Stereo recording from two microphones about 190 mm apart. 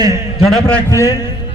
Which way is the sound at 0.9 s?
20° left (ahead or behind).